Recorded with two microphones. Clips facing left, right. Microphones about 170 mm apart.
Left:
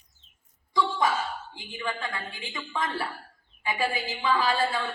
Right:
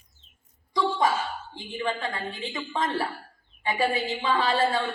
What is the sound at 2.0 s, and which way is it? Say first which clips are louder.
A man's voice: right 4 dB; 35° right (ahead or behind).